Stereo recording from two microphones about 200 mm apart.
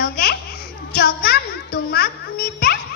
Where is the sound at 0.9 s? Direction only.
50° left (ahead or behind).